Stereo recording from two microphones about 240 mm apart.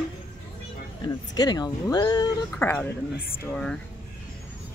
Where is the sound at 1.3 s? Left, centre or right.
Centre.